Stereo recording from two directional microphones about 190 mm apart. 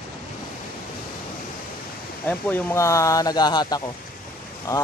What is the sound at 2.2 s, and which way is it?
Speech, 10° left (ahead or behind).